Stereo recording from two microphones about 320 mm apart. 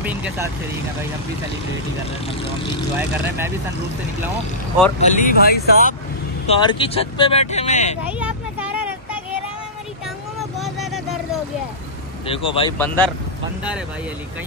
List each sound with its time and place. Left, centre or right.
0.0 s vehicle: centre
5.0 s speech: left
6.4 s speech: centre
8.0 s vehicle: centre
10.6 s vehicle: centre
12.3 s speech: centre
12.7 s speech: centre